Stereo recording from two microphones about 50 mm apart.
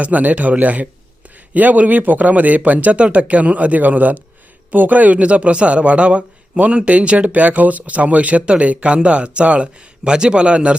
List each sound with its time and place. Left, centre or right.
0.0 s a man's voice: right